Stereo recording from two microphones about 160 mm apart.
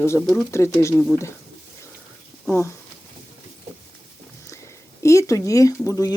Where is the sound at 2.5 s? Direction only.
15° left (ahead or behind).